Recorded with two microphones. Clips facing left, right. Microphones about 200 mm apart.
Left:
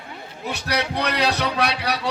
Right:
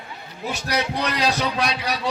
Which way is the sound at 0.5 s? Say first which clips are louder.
Even; 65° left (ahead or behind).